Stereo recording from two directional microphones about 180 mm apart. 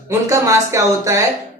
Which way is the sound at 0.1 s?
20° right (ahead or behind).